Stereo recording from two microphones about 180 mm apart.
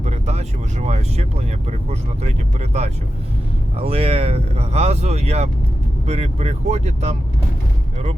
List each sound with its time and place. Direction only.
0.0 s speech: 40° right (ahead or behind)